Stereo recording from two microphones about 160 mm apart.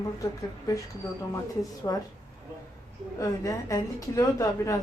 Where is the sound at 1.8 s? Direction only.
20° left (ahead or behind).